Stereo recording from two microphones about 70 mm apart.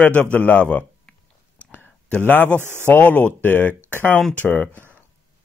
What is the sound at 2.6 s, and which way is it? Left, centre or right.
Speech, right.